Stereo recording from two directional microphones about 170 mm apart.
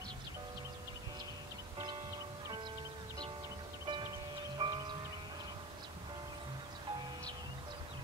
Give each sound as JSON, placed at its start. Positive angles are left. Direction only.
{"t": 3.8, "sound": "music", "side_deg": -25}